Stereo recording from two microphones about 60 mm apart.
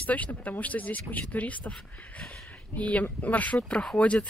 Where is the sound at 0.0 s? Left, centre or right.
Left.